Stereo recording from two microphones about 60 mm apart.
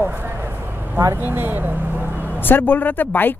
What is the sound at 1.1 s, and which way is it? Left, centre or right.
Speech, right.